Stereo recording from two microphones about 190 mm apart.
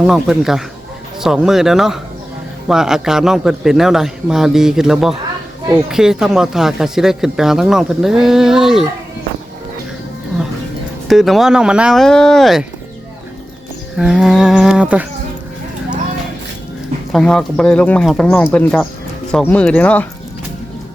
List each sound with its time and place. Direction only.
0.0 s speech: centre (ahead or behind)
11.1 s speech: centre (ahead or behind)
13.9 s speech: 5° right (ahead or behind)
17.1 s speech: 5° left (ahead or behind)